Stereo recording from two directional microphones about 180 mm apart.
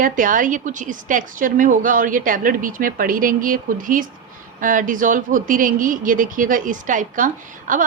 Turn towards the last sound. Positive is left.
turn(degrees=-45)  # may be behind; listen again after turning